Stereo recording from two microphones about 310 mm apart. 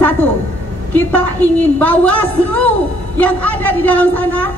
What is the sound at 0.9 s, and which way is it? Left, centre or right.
A woman's voice, centre.